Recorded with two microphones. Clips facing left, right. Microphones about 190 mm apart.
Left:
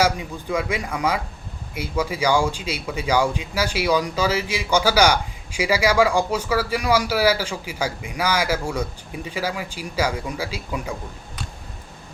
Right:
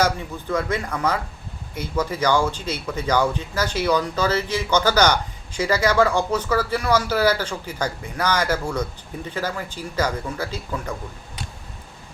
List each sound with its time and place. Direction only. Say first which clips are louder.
0.0 s speech: left 1 dB; 10° left (ahead or behind)